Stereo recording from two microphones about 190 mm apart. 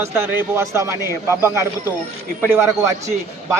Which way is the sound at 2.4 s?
15° right (ahead or behind).